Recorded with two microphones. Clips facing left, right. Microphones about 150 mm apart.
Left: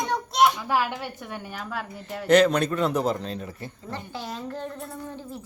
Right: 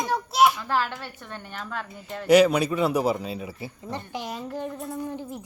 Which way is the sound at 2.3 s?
10° right (ahead or behind).